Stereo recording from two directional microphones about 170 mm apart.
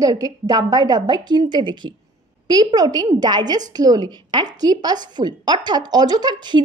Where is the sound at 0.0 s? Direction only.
20° right (ahead or behind).